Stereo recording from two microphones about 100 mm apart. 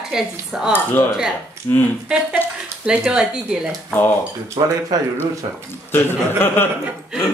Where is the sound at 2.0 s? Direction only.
10° right (ahead or behind).